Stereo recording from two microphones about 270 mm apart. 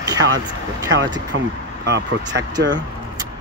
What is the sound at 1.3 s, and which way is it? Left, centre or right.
Speech, right.